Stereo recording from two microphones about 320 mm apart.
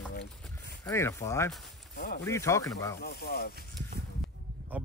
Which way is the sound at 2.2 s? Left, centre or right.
Centre.